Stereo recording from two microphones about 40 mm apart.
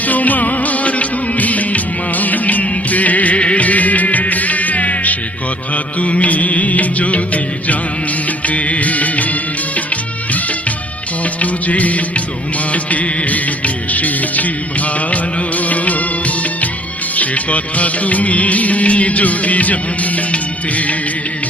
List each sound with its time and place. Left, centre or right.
0.1 s music: left
8.4 s music: left
11.3 s music: left
15.1 s music of bollywood: left
17.2 s music: left
20.3 s music of bollywood: left